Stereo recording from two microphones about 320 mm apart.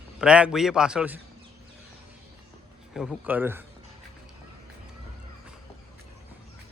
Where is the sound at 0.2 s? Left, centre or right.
Centre.